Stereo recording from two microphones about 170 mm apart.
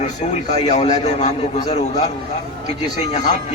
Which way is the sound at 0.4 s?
40° left (ahead or behind).